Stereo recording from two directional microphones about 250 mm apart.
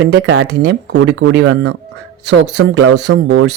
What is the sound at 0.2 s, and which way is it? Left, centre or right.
Speech, right.